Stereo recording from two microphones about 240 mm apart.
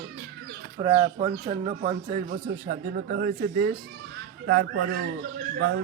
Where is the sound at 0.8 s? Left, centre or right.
Right.